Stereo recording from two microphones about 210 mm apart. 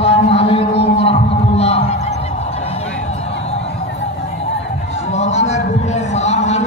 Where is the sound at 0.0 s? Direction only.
30° left (ahead or behind).